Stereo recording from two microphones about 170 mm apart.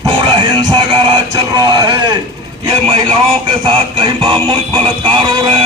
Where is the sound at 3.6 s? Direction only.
30° right (ahead or behind).